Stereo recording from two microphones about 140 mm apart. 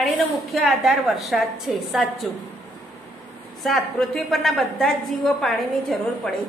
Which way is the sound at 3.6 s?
Centre (ahead or behind).